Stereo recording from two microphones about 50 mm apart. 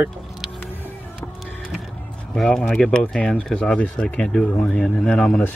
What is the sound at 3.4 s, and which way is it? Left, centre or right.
Speech, centre.